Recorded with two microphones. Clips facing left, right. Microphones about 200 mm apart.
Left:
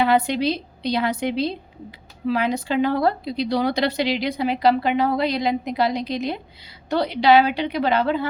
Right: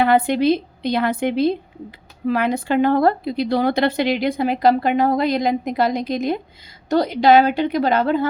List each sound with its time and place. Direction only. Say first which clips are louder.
0.0 s a woman's voice: right 3 dB; 55° right (ahead or behind)